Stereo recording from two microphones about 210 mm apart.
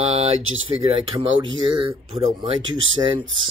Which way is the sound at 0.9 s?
25° right (ahead or behind).